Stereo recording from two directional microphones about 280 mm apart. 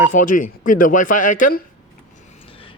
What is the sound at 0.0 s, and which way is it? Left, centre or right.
Speech, left.